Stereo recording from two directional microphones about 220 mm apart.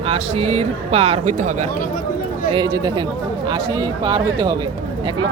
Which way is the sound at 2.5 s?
20° right (ahead or behind).